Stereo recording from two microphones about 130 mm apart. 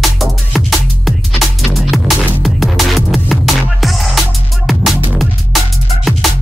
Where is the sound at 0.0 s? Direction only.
Centre (ahead or behind).